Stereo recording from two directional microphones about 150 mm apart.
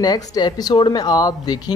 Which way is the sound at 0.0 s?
25° left (ahead or behind).